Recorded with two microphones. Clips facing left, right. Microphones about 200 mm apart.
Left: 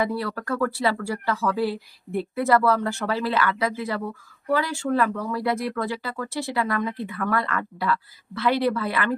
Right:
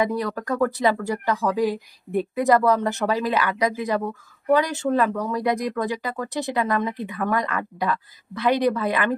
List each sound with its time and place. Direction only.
0.0 s speech: 15° right (ahead or behind)